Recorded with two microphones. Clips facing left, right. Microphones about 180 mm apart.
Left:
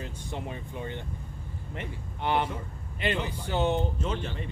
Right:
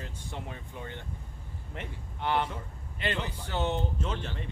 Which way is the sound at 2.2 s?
20° left (ahead or behind).